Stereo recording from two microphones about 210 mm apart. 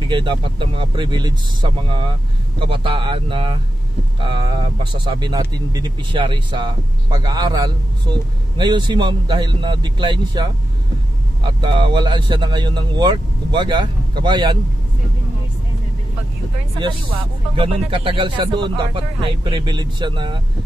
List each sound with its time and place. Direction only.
0.0 s speech: 20° right (ahead or behind)
17.6 s speech: 25° right (ahead or behind)